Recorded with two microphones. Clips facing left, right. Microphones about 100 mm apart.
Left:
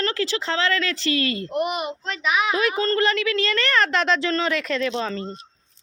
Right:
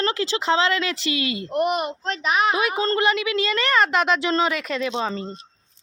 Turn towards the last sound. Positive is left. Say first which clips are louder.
# even
turn(degrees=-15)  # may be behind; listen again after turning